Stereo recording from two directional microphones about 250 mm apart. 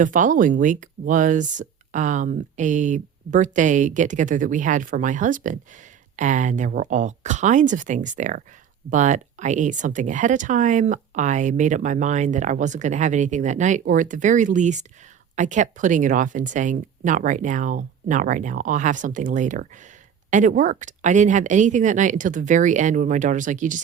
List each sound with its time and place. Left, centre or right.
0.0 s speech: right